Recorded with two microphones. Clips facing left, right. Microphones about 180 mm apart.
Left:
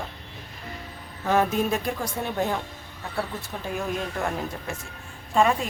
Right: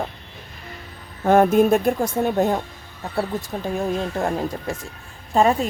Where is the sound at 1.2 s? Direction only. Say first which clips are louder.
Right 8 dB; 50° right (ahead or behind).